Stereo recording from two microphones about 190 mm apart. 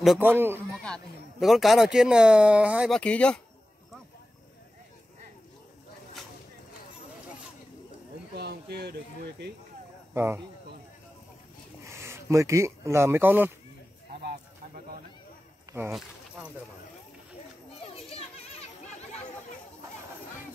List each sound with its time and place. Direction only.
0.0 s speech: 5° right (ahead or behind)
0.8 s speech: centre (ahead or behind)
3.0 s speech: 5° left (ahead or behind)
8.4 s a sound: 60° right (ahead or behind)
10.1 s speech: 10° right (ahead or behind)
11.8 s speech: 15° right (ahead or behind)